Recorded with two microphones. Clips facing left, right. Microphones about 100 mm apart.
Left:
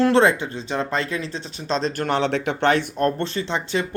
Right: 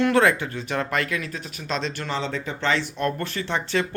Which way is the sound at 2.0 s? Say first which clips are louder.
Left 7 dB; 65° left (ahead or behind).